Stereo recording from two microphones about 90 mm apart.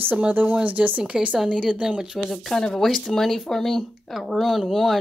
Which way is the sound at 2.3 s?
5° left (ahead or behind).